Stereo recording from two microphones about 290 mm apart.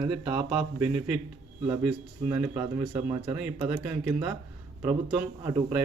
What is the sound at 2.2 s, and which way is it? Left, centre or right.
Speech, centre.